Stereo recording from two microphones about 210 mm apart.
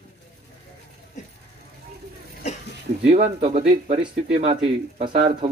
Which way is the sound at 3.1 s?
30° right (ahead or behind).